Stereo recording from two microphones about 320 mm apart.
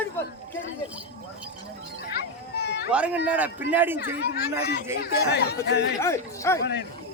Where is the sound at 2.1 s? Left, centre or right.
Left.